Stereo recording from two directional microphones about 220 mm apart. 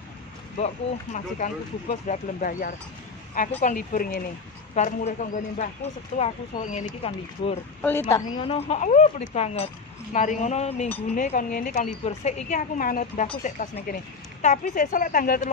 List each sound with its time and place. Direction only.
1.1 s speech: 35° left (ahead or behind)